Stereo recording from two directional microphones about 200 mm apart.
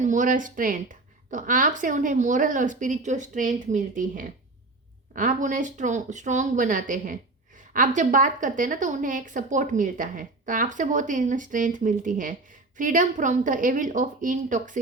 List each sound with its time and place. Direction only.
0.0 s speech: 40° right (ahead or behind)